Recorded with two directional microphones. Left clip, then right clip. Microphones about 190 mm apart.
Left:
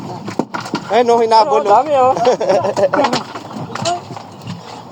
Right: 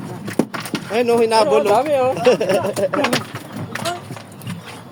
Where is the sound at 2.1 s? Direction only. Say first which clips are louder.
Left 2 dB; 65° right (ahead or behind).